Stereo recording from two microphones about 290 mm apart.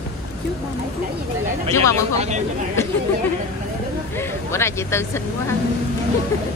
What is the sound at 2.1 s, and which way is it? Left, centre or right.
Speech, right.